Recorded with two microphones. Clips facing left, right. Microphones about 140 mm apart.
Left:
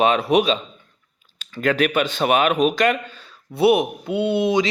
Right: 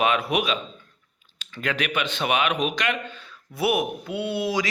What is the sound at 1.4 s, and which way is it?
Speech, 45° left (ahead or behind).